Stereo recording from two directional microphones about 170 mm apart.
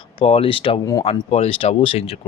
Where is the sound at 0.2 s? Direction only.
35° left (ahead or behind).